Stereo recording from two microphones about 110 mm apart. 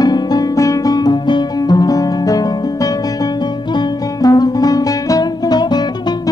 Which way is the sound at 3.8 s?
35° left (ahead or behind).